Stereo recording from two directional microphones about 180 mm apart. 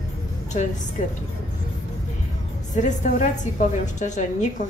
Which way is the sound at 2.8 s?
45° left (ahead or behind).